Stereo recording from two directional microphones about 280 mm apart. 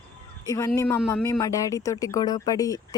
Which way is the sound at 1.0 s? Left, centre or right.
Centre.